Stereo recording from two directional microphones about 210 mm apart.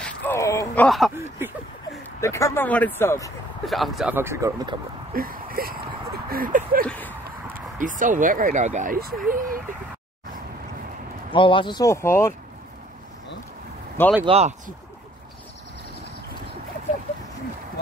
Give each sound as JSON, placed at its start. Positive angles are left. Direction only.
{"t": 0.0, "sound": "a sound", "side_deg": 10}
{"t": 0.8, "sound": "speech", "side_deg": 0}
{"t": 2.1, "sound": "speech", "side_deg": 15}
{"t": 3.6, "sound": "speech", "side_deg": 0}
{"t": 5.1, "sound": "a sound", "side_deg": -45}
{"t": 6.3, "sound": "speech", "side_deg": -40}
{"t": 6.9, "sound": "speech", "side_deg": 10}
{"t": 7.2, "sound": "speech", "side_deg": -40}
{"t": 11.2, "sound": "speech", "side_deg": 25}
{"t": 14.2, "sound": "speech", "side_deg": -30}